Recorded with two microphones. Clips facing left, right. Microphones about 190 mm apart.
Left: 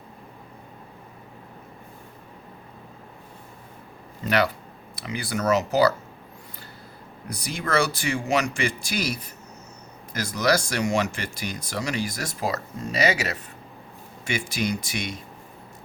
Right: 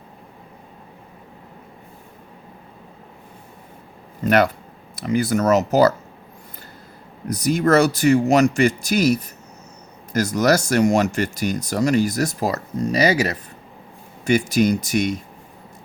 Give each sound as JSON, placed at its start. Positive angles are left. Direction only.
{"t": 4.3, "sound": "speech", "side_deg": -50}
{"t": 7.3, "sound": "speech", "side_deg": -40}